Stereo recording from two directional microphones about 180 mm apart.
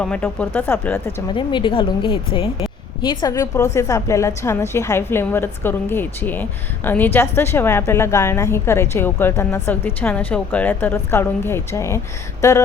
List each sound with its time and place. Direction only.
0.0 s a woman's voice: 5° left (ahead or behind)
1.3 s a woman's voice: 25° left (ahead or behind)
12.4 s a sound: 15° left (ahead or behind)